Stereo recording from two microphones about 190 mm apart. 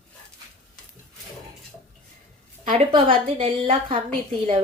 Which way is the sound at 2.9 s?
30° right (ahead or behind).